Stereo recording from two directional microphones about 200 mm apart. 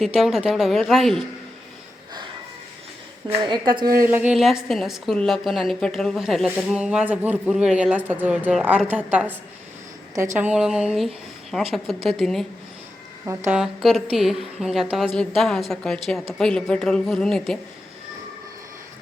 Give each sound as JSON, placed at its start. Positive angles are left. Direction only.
{"t": 0.2, "sound": "a woman's voice", "side_deg": 0}
{"t": 3.2, "sound": "a woman's voice", "side_deg": -20}
{"t": 4.0, "sound": "a woman's voice", "side_deg": -10}
{"t": 10.3, "sound": "a woman's voice", "side_deg": -5}
{"t": 13.2, "sound": "a woman's voice", "side_deg": -10}